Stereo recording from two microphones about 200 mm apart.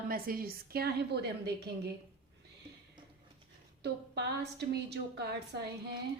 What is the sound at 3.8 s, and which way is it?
Speech, 55° right (ahead or behind).